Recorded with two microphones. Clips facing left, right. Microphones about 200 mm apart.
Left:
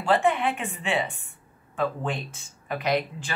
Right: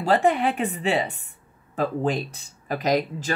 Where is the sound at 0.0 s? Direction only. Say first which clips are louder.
Right 2 dB; 40° right (ahead or behind).